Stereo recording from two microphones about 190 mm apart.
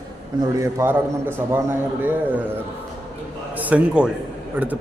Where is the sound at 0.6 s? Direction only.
15° right (ahead or behind).